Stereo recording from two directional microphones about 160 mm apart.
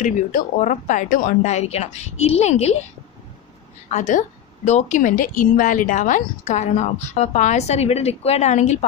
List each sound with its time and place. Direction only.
0.0 s a woman's voice: 50° left (ahead or behind)
3.9 s a woman's voice: 50° left (ahead or behind)